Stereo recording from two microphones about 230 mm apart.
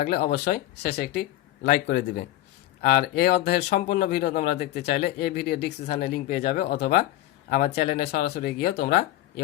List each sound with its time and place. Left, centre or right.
0.0 s speech: left